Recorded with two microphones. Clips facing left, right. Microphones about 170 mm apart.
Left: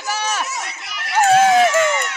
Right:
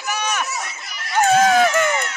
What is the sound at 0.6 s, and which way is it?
Chatter, 75° left (ahead or behind).